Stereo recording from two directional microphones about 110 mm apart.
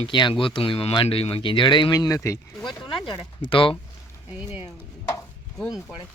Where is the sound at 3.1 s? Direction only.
50° left (ahead or behind).